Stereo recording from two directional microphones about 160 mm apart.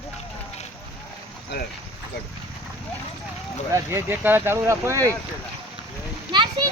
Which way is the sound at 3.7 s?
20° right (ahead or behind).